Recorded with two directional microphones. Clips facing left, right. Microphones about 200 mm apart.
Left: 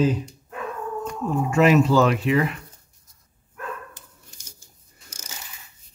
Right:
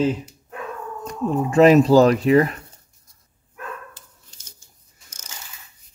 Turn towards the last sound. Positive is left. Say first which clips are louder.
# left 4 dB
turn(degrees=10)  # may be behind; listen again after turning